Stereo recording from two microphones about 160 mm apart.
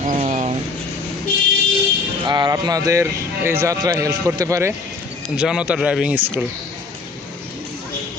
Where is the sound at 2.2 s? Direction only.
25° right (ahead or behind).